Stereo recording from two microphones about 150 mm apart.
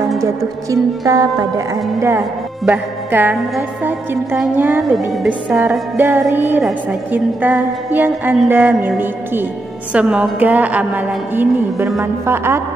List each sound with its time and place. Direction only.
0.7 s music: 25° right (ahead or behind)
2.0 s a woman's voice: 15° right (ahead or behind)
5.1 s speech: centre (ahead or behind)
5.6 s a woman's voice: 10° right (ahead or behind)